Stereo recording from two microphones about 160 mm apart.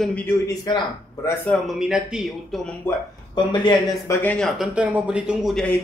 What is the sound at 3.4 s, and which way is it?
Speech, 30° left (ahead or behind).